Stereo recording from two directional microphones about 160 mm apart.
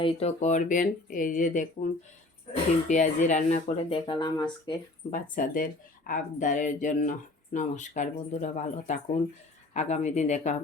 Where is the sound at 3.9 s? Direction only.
30° left (ahead or behind).